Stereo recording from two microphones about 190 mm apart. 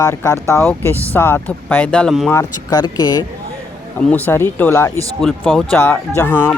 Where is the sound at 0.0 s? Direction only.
15° left (ahead or behind).